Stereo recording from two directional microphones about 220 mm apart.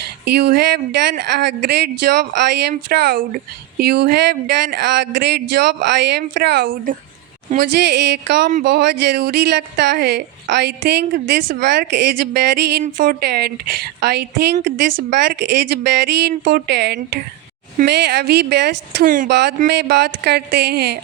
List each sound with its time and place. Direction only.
0.3 s speech: 50° right (ahead or behind)